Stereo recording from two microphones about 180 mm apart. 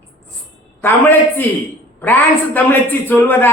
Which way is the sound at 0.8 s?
10° left (ahead or behind).